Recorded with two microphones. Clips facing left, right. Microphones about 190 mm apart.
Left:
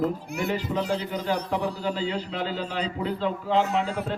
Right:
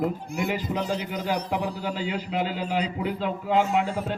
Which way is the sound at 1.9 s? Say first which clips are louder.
Even; 15° right (ahead or behind).